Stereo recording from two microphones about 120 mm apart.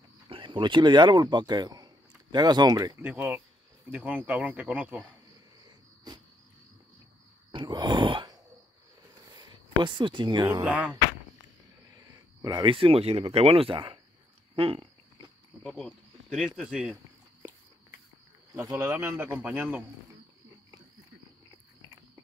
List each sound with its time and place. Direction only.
0.3 s speech: 45° right (ahead or behind)
3.0 s speech: 15° right (ahead or behind)
5.7 s cricket: 35° right (ahead or behind)
7.5 s groan: 35° right (ahead or behind)
9.3 s speech: 35° right (ahead or behind)
10.6 s speech: 10° right (ahead or behind)
11.9 s speech: 30° right (ahead or behind); by 13.9 s 45° right (ahead or behind)
14.5 s a sound: 50° right (ahead or behind)
15.6 s speech: centre (ahead or behind)
18.7 s speech: 15° right (ahead or behind)
21.5 s a sound: 30° right (ahead or behind)